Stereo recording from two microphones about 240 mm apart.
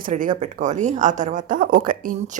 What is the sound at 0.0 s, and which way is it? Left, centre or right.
A woman's voice, right.